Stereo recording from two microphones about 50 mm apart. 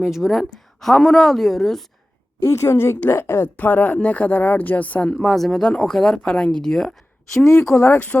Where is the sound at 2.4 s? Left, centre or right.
Left.